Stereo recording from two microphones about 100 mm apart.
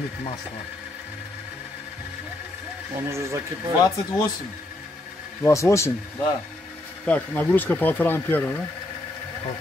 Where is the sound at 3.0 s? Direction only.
30° right (ahead or behind).